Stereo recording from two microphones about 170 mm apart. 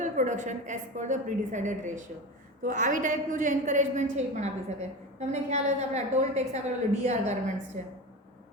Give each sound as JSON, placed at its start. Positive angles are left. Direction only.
{"t": 0.0, "sound": "a woman's voice", "side_deg": -45}